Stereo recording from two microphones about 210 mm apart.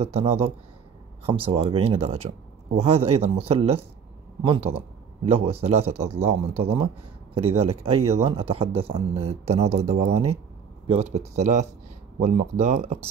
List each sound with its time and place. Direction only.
0.0 s speech: 30° right (ahead or behind)